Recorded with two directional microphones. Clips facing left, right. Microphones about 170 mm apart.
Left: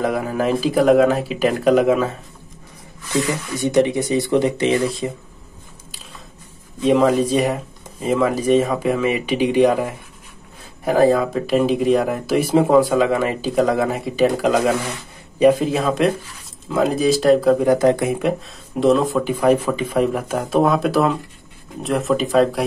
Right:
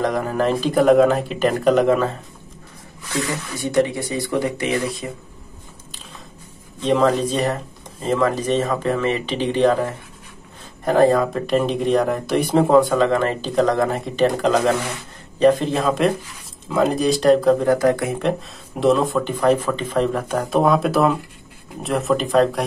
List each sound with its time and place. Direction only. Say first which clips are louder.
0.0 s speech: even; 5° left (ahead or behind)
3.1 s speech: left 4 dB; 20° left (ahead or behind)
6.8 s speech: left 2 dB; 10° left (ahead or behind)
17.6 s speech: left 2 dB; 20° left (ahead or behind)
18.8 s speech: left 1 dB; centre (ahead or behind)